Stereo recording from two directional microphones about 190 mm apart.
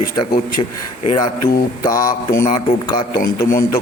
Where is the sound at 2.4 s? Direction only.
30° left (ahead or behind).